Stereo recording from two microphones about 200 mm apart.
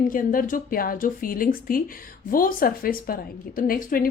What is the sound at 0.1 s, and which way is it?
A woman's voice, 45° left (ahead or behind).